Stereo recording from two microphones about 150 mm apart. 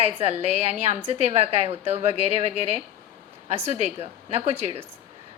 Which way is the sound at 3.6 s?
45° right (ahead or behind).